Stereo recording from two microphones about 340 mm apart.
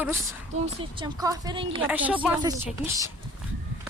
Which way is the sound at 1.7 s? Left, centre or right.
Centre.